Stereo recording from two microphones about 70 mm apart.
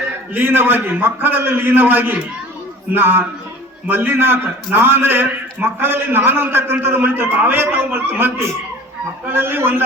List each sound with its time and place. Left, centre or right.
0.3 s a man's voice: right
9.3 s a man's voice: right